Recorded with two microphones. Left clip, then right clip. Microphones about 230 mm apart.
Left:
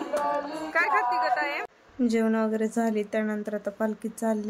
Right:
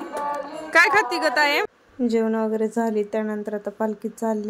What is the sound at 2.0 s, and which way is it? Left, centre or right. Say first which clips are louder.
A woman's voice: right 3 dB; centre.